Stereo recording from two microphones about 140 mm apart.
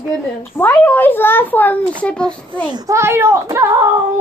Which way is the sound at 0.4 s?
15° left (ahead or behind).